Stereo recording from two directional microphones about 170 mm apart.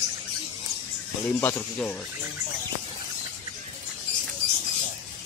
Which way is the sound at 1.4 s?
5° left (ahead or behind).